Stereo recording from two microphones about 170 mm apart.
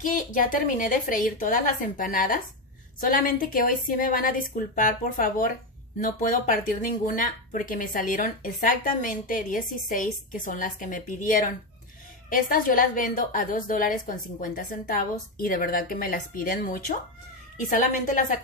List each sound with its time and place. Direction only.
0.0 s a woman's voice: 50° left (ahead or behind)